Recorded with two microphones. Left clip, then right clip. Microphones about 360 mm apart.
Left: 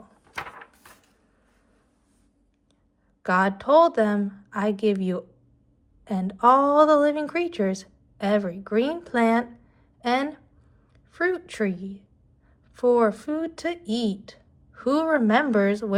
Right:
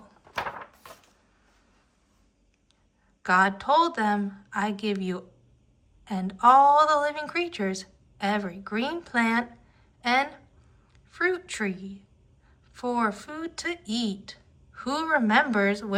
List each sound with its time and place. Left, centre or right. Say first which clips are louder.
3.2 s a woman's voice: even; centre